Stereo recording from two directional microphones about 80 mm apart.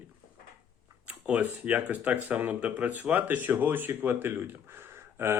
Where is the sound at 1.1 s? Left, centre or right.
Centre.